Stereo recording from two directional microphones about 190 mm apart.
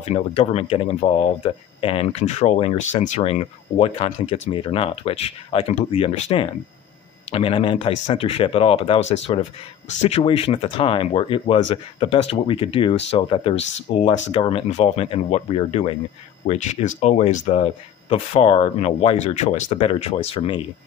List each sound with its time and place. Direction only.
0.0 s speech: 35° left (ahead or behind)